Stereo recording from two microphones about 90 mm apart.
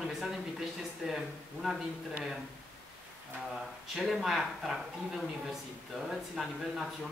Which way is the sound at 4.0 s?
Centre (ahead or behind).